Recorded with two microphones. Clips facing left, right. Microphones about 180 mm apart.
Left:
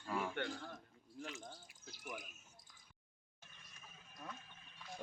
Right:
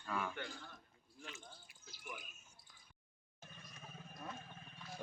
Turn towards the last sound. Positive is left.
turn(degrees=-45)  # may be behind; listen again after turning